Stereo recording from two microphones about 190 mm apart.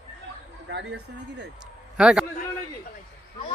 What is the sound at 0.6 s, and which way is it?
Speech, 65° right (ahead or behind).